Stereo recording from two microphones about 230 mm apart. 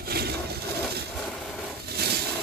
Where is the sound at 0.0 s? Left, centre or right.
Right.